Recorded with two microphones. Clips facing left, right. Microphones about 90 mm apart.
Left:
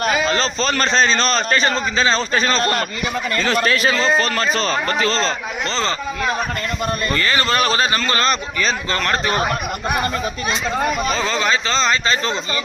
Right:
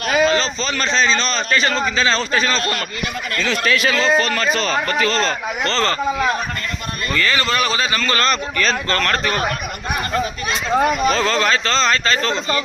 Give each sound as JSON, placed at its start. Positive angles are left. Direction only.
{"t": 0.0, "sound": "a man's voice", "side_deg": 40}
{"t": 1.6, "sound": "a man's voice", "side_deg": 25}
{"t": 5.6, "sound": "a man's voice", "side_deg": 20}
{"t": 7.1, "sound": "a man's voice", "side_deg": 30}
{"t": 8.0, "sound": "a man's voice", "side_deg": 25}
{"t": 10.8, "sound": "speech", "side_deg": -10}
{"t": 11.1, "sound": "speech", "side_deg": 5}